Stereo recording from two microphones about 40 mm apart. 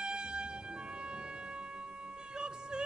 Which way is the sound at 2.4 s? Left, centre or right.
Right.